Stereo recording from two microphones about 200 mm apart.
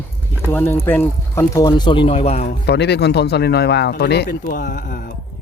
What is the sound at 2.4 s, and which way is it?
Speech, 55° left (ahead or behind).